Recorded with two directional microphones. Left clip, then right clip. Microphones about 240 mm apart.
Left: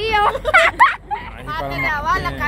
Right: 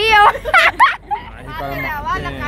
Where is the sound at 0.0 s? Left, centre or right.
Right.